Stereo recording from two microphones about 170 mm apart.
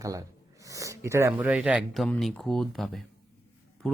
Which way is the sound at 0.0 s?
20° right (ahead or behind).